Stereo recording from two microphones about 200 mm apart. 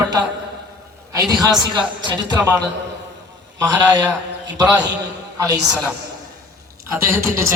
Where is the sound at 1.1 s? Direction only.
20° right (ahead or behind).